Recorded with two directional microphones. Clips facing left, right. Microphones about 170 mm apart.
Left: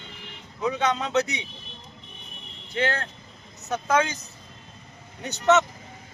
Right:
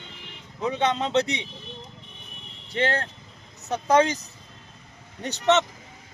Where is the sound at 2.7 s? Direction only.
30° right (ahead or behind).